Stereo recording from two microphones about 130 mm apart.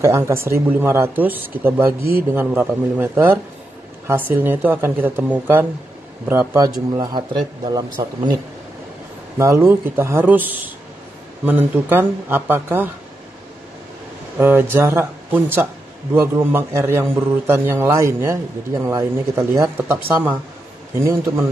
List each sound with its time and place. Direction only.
0.0 s a man's voice: 20° right (ahead or behind)
6.9 s speech: 30° right (ahead or behind)
9.4 s a man's voice: 20° right (ahead or behind)
14.4 s a man's voice: 15° right (ahead or behind)